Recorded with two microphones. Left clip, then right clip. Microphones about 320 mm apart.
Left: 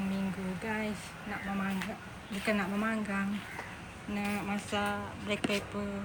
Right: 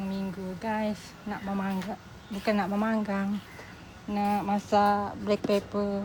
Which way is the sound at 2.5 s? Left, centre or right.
Centre.